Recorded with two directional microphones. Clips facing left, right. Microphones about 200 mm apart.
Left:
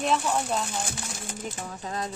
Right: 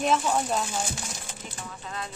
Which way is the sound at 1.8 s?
40° left (ahead or behind).